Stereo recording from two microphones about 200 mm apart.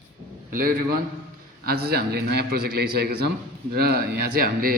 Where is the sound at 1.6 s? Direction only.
50° right (ahead or behind).